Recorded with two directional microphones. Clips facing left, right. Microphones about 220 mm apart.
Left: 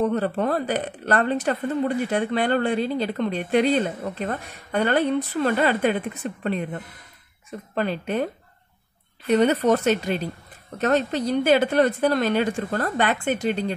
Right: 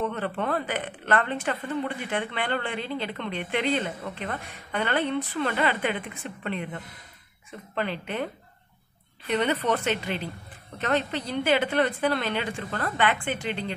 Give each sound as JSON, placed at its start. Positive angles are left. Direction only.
{"t": 0.0, "sound": "speech", "side_deg": 40}
{"t": 9.3, "sound": "speech", "side_deg": 40}